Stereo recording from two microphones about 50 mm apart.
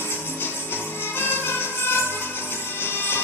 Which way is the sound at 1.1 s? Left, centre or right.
Left.